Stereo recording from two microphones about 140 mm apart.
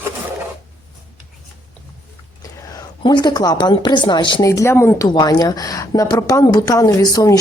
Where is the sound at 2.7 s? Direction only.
30° left (ahead or behind).